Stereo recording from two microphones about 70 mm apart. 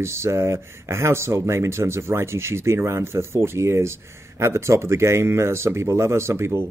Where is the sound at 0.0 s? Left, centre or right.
Right.